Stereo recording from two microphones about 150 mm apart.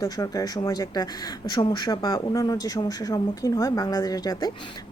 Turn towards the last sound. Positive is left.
turn(degrees=25)  # may be behind; listen again after turning